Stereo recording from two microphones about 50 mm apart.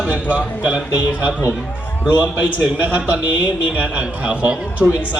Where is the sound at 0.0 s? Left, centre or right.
Right.